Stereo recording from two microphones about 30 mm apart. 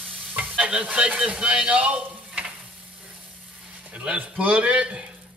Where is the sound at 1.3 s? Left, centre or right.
Right.